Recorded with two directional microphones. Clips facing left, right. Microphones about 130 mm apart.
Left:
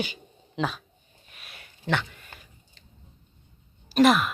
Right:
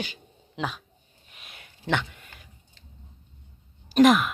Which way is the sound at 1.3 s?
20° right (ahead or behind).